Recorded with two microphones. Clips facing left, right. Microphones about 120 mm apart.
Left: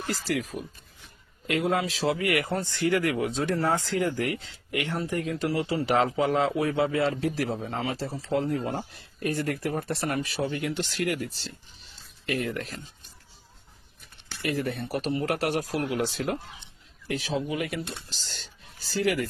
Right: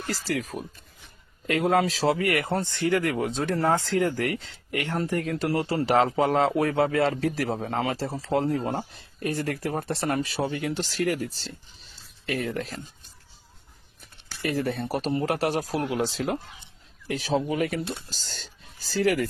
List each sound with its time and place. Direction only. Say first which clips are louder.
0.1 s speech: even; 40° right (ahead or behind)
14.4 s speech: right 2 dB; 35° right (ahead or behind)
15.2 s speech: right 2 dB; 30° right (ahead or behind)
17.1 s speech: right 3 dB; 40° right (ahead or behind)